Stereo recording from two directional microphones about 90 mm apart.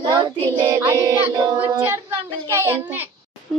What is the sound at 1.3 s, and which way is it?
Speech, 45° right (ahead or behind).